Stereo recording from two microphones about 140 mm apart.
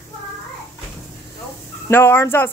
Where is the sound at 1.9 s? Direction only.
15° left (ahead or behind).